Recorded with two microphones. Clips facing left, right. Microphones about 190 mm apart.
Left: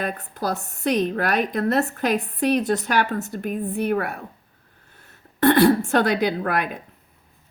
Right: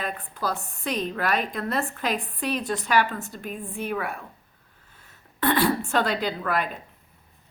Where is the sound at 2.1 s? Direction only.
40° left (ahead or behind).